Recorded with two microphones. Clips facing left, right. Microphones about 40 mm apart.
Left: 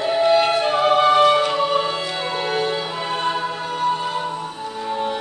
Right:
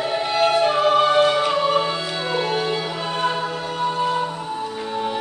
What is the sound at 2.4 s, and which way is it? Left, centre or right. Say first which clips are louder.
Music: even; centre.